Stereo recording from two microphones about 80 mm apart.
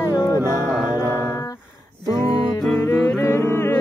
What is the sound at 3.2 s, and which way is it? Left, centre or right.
Humming, left.